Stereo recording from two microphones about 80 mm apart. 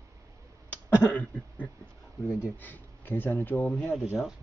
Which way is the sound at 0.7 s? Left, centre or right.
Centre.